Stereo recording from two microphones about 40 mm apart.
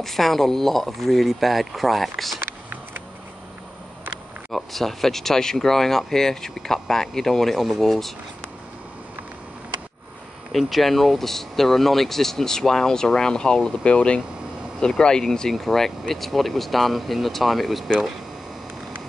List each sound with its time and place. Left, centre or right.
0.0 s speech: centre
4.5 s speech: centre
10.7 s speech: centre